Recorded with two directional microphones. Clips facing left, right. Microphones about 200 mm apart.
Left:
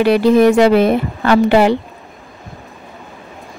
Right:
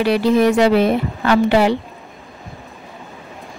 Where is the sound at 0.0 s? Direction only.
55° left (ahead or behind).